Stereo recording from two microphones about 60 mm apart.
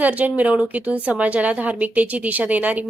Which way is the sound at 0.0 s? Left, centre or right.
Right.